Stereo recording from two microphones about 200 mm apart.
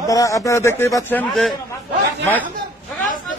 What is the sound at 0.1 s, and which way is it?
A man's voice, 15° left (ahead or behind).